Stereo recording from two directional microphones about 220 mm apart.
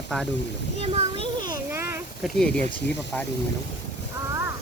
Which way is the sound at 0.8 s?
25° right (ahead or behind).